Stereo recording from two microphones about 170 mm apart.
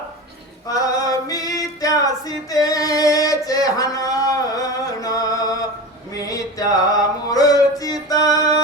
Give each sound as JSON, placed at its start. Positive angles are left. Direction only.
{"t": 0.7, "sound": "female singing", "side_deg": 20}
{"t": 6.1, "sound": "a sound", "side_deg": 20}
{"t": 7.3, "sound": "music", "side_deg": 20}